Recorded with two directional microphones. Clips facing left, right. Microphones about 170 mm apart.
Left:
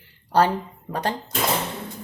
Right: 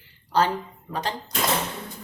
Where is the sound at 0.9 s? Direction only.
35° left (ahead or behind).